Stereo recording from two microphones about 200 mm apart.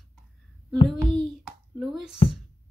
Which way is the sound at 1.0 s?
Centre (ahead or behind).